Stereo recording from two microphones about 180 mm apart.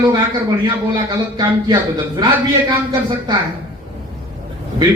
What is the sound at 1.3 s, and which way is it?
Speech, 25° right (ahead or behind).